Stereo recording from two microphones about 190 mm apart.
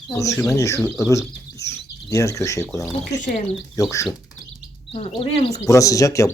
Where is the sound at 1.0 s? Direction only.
15° left (ahead or behind).